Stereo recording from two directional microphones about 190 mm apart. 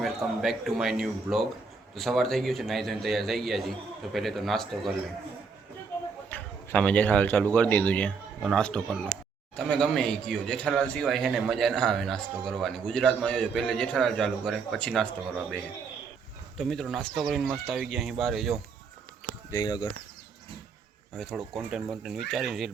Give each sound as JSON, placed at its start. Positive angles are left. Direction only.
{"t": 0.0, "sound": "a man's voice", "side_deg": 0}
{"t": 6.2, "sound": "a man's voice", "side_deg": 10}
{"t": 19.5, "sound": "speech", "side_deg": 20}
{"t": 21.2, "sound": "a man's voice", "side_deg": 0}